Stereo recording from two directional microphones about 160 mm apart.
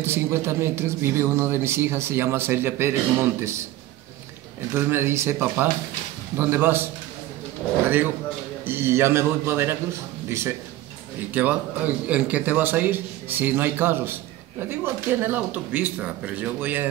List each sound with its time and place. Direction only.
0.0 s speech: 15° right (ahead or behind)
4.7 s speech: 15° right (ahead or behind)
8.6 s a man's voice: 15° right (ahead or behind)